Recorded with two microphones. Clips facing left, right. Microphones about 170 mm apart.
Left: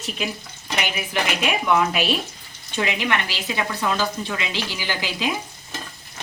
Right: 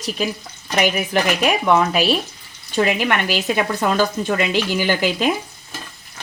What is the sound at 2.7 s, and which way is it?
Speech, 45° right (ahead or behind).